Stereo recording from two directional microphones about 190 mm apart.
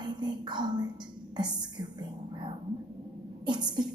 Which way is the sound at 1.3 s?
20° right (ahead or behind).